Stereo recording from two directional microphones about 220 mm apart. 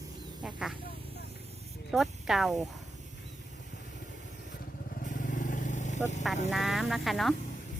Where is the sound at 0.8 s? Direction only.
45° left (ahead or behind).